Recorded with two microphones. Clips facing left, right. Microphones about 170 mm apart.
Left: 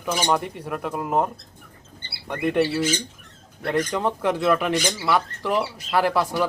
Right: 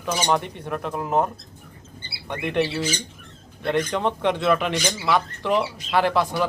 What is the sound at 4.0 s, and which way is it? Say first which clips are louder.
Speech: even; 5° left (ahead or behind).